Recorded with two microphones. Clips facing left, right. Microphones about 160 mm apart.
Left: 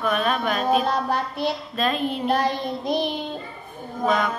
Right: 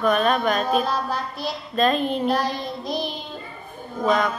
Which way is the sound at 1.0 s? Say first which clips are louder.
Left 3 dB; 60° left (ahead or behind).